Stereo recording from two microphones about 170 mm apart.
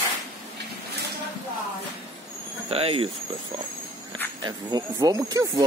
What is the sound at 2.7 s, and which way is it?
Speech, 35° right (ahead or behind).